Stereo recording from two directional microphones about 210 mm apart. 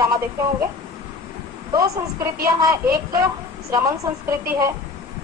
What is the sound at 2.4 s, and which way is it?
A woman's voice, 15° right (ahead or behind).